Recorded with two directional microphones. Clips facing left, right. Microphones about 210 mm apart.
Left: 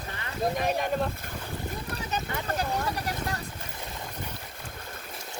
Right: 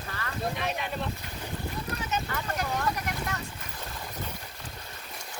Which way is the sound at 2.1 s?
35° left (ahead or behind).